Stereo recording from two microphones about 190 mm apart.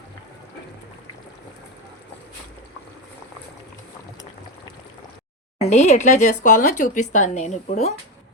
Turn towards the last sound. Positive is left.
turn(degrees=35)  # may be behind; listen again after turning